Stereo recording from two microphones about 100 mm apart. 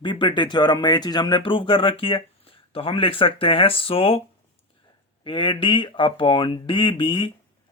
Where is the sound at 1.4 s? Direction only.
60° left (ahead or behind).